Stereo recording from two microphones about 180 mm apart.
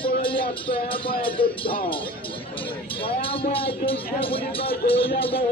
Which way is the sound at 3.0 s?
30° left (ahead or behind).